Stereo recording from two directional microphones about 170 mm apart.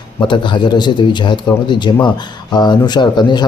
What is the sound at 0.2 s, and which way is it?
Speech, 30° left (ahead or behind).